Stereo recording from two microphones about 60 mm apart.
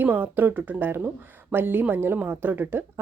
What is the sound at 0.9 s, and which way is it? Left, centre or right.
Speech, right.